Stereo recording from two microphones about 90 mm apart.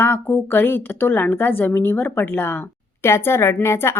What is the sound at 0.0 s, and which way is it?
A woman's voice, 25° left (ahead or behind).